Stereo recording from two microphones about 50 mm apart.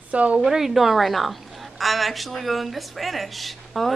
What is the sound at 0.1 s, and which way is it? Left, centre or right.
Speech, right.